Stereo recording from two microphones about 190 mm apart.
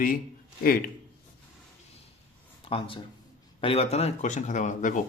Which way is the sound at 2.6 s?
30° left (ahead or behind).